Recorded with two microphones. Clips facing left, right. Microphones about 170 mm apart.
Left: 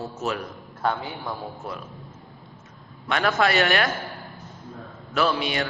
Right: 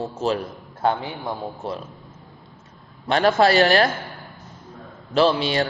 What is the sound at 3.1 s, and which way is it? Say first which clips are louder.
Speech: right 5 dB; 30° right (ahead or behind).